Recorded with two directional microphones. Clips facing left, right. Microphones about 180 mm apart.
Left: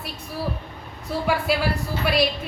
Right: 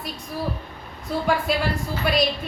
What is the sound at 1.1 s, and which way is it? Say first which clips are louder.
A woman's voice: even; centre (ahead or behind).